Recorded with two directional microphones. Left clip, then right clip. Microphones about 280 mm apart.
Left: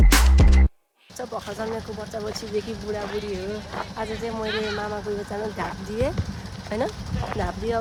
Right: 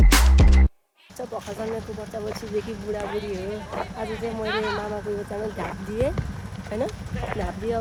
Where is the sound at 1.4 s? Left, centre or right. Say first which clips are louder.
Left 1 dB; centre.